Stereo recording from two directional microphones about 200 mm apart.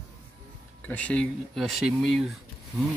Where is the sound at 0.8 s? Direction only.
5° left (ahead or behind).